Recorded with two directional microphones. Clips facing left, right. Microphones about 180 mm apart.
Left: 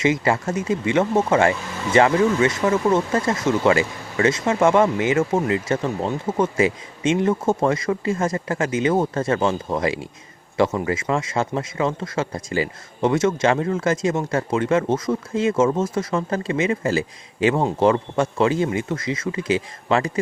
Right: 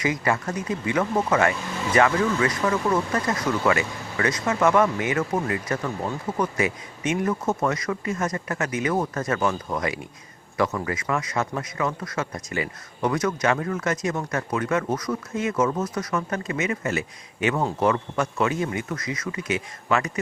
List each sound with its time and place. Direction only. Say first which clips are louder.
0.0 s speech: left 5 dB; 25° left (ahead or behind)